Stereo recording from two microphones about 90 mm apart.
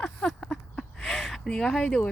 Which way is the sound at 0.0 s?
5° left (ahead or behind).